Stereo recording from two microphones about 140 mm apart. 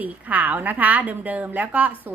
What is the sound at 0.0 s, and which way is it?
A woman's voice, 10° right (ahead or behind).